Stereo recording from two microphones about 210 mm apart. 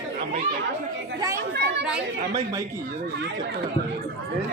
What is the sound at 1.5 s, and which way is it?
Speech, 50° right (ahead or behind).